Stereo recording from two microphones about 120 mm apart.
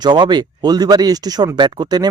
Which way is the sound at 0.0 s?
40° right (ahead or behind).